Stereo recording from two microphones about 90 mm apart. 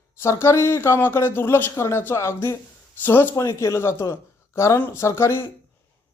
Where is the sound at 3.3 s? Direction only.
35° left (ahead or behind).